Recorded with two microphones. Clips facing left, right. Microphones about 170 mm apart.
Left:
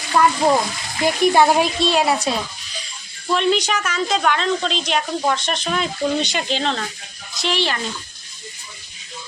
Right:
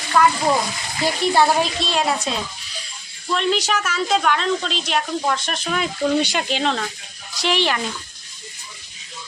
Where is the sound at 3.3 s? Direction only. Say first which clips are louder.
Left 2 dB; centre (ahead or behind).